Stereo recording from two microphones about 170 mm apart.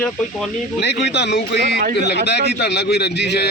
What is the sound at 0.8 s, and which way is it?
A man's voice, 80° left.